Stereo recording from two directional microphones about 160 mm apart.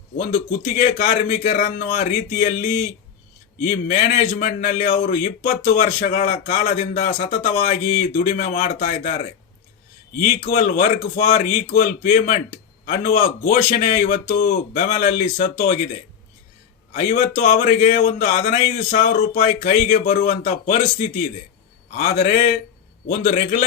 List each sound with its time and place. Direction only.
0.6 s a man's voice: 55° left (ahead or behind)
11.3 s a man's voice: 50° left (ahead or behind)
17.1 s a man's voice: 55° left (ahead or behind)
21.9 s a man's voice: 45° left (ahead or behind)
23.0 s a man's voice: 60° left (ahead or behind)